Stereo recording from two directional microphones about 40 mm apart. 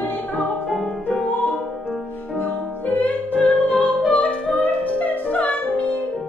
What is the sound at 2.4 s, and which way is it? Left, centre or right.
Music, left.